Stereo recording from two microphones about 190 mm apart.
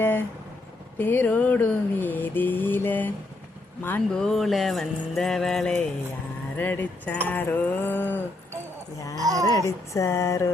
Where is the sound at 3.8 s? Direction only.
10° left (ahead or behind).